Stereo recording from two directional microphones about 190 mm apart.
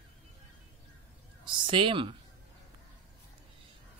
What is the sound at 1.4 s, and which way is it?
Speech, 25° right (ahead or behind).